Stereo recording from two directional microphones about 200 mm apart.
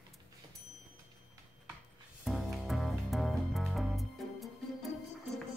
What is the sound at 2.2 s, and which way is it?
Music, centre (ahead or behind).